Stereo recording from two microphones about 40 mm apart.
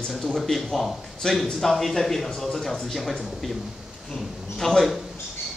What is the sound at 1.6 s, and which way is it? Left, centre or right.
A man's voice, centre.